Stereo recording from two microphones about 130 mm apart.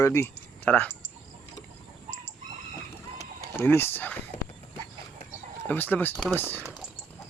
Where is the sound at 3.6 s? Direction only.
20° left (ahead or behind).